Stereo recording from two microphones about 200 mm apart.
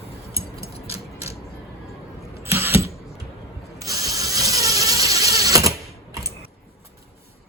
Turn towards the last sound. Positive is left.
turn(degrees=-15)  # may be behind; listen again after turning